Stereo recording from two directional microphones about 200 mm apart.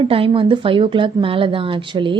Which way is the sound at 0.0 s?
25° right (ahead or behind).